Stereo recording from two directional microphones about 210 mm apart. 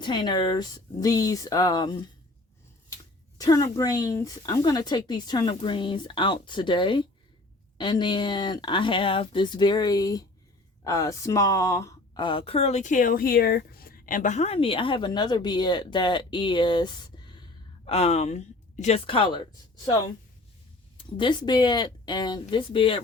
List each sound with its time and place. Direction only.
0.0 s speech: 20° left (ahead or behind)
3.3 s speech: 15° left (ahead or behind)